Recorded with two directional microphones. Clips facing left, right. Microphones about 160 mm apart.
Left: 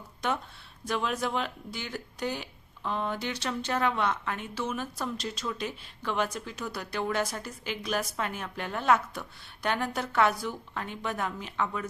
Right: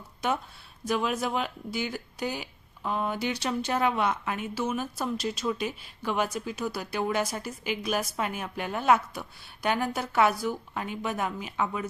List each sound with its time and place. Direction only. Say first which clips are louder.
0.2 s a woman's voice: right 2 dB; 5° right (ahead or behind)